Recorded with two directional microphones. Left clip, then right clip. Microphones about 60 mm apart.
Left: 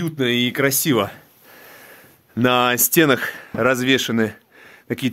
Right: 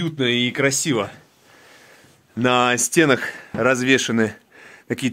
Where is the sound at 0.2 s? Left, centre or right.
Left.